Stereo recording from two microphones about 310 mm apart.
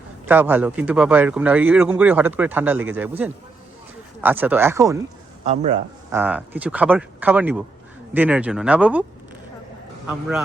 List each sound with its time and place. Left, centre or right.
0.3 s speech: centre
5.5 s a man's voice: right
6.1 s speech: centre